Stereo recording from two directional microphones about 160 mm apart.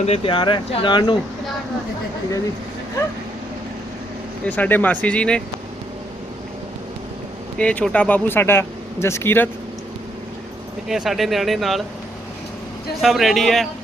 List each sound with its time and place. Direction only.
0.0 s speech: 40° left (ahead or behind)
4.4 s speech: 10° left (ahead or behind)
7.6 s speech: 5° left (ahead or behind)
10.8 s speech: 5° right (ahead or behind)
13.0 s speech: centre (ahead or behind)